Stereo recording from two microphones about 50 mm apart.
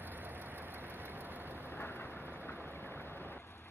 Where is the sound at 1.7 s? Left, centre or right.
Left.